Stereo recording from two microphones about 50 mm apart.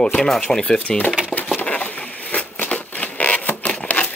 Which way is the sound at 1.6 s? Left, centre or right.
Left.